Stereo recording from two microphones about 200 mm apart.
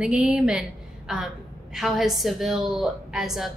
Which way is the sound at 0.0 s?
5° right (ahead or behind).